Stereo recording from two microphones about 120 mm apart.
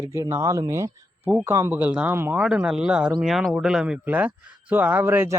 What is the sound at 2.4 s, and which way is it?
Speech, 5° right (ahead or behind).